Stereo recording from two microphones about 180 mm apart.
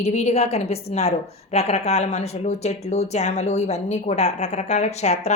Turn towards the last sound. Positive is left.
turn(degrees=40)  # may be behind; listen again after turning